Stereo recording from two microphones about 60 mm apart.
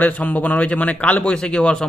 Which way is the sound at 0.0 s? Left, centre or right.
Left.